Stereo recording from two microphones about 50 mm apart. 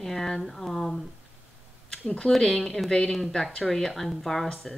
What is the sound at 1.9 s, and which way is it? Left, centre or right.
A woman's voice, centre.